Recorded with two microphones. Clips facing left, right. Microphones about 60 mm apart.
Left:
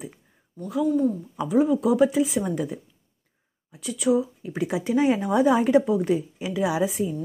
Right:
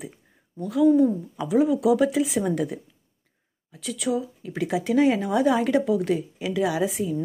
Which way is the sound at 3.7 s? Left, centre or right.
Centre.